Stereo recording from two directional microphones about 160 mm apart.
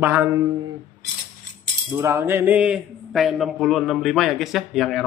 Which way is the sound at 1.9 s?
15° right (ahead or behind).